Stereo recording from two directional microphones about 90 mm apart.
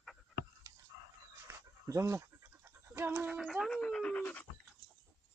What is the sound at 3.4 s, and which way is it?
Dog, centre (ahead or behind).